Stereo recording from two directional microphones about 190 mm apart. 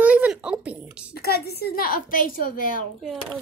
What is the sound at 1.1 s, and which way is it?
A woman's voice, 55° left (ahead or behind).